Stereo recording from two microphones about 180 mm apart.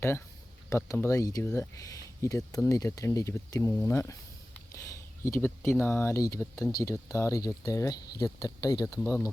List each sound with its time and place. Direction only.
0.7 s speech: 15° left (ahead or behind)